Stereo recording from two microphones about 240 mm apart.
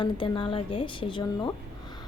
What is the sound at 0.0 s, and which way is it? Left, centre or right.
A woman's voice, left.